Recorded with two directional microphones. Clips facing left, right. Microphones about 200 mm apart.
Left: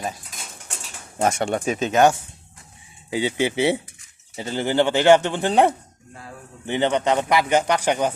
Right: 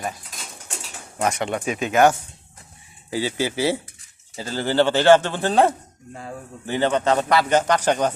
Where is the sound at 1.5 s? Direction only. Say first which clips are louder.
Left 2 dB; 35° left (ahead or behind).